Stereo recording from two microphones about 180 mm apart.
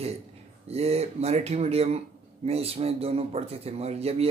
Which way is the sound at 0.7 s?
35° right (ahead or behind).